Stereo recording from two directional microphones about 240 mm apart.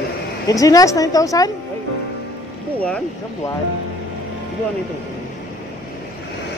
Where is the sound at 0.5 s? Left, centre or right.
Centre.